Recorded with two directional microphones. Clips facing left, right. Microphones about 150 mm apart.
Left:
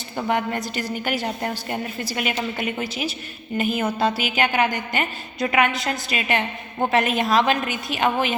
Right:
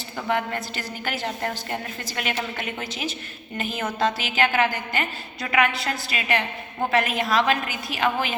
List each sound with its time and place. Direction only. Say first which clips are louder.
0.2 s a woman's voice: left 3 dB; 20° left (ahead or behind)